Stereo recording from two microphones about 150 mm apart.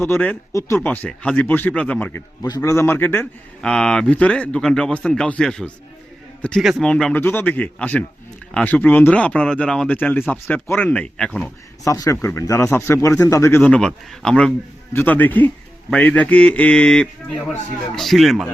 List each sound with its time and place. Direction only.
0.0 s a man's voice: 15° left (ahead or behind)
11.9 s a man's voice: 20° left (ahead or behind); by 18.4 s centre (ahead or behind)